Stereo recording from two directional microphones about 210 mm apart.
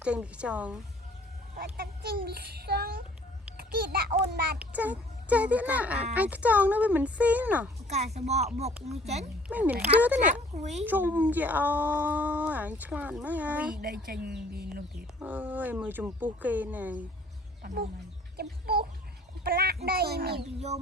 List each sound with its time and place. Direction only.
0.0 s a woman's voice: 5° right (ahead or behind)
1.5 s a child's voice: 45° right (ahead or behind)
4.6 s speech: 5° right (ahead or behind)
7.9 s speech: 30° right (ahead or behind)
9.5 s speech: 5° right (ahead or behind)
10.5 s speech: 30° right (ahead or behind)
10.8 s speech: 10° right (ahead or behind)
13.8 s a child's voice: 45° right (ahead or behind)
15.2 s speech: 10° right (ahead or behind)
17.6 s speech: 45° right (ahead or behind)
18.3 s chicken: 50° right (ahead or behind)
19.5 s a child's voice: 45° right (ahead or behind)